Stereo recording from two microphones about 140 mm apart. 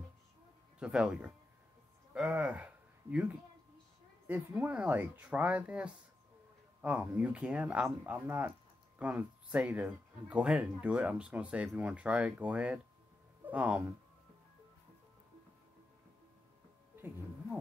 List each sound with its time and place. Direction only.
0.7 s speech: 5° right (ahead or behind)
16.9 s music: 15° right (ahead or behind)